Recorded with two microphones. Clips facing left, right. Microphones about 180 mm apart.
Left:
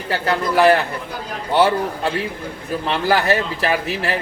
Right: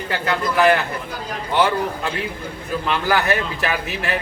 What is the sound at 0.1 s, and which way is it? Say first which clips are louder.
Speech: left 3 dB; 35° left (ahead or behind).